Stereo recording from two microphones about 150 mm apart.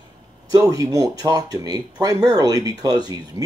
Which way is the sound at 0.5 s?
25° right (ahead or behind).